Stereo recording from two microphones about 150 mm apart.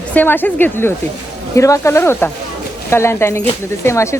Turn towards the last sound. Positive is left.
turn(degrees=20)  # may be behind; listen again after turning